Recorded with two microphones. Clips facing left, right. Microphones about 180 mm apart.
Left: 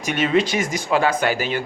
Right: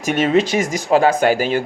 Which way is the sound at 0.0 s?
45° right (ahead or behind).